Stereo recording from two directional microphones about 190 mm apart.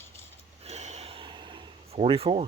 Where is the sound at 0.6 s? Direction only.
35° right (ahead or behind).